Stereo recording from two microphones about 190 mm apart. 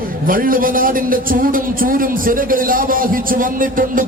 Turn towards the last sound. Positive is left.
turn(degrees=-45)  # may be behind; listen again after turning